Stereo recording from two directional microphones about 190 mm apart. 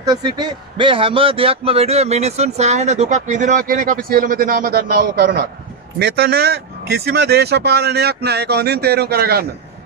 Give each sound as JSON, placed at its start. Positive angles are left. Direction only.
{"t": 0.0, "sound": "speech", "side_deg": -20}